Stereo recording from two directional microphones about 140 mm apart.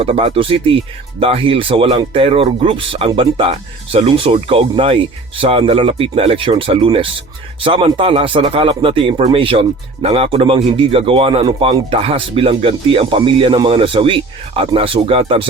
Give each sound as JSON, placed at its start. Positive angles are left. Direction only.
{"t": 0.0, "sound": "speech", "side_deg": -40}